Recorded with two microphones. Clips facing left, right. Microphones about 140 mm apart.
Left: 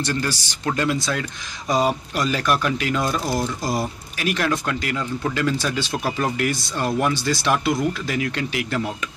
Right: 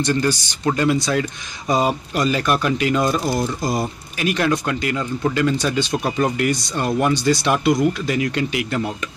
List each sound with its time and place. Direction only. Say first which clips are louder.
0.1 s speech: right 7 dB; 20° right (ahead or behind)
0.7 s speech: right 4 dB; 5° right (ahead or behind)